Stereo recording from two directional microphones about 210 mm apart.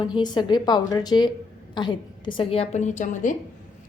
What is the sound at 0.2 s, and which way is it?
A woman's voice, 20° left (ahead or behind).